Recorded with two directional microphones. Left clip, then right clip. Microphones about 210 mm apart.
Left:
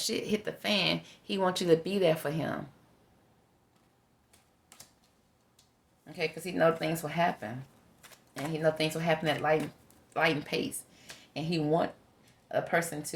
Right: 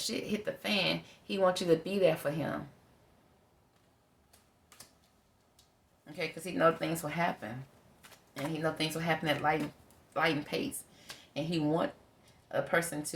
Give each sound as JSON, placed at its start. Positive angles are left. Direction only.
{"t": 0.0, "sound": "speech", "side_deg": 35}
{"t": 6.1, "sound": "speech", "side_deg": 35}
{"t": 8.5, "sound": "speech", "side_deg": 35}